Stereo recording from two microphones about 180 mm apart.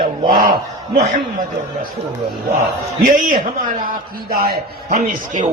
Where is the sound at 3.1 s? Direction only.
50° right (ahead or behind).